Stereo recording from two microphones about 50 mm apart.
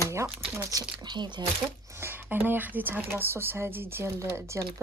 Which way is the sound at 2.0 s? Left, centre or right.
Right.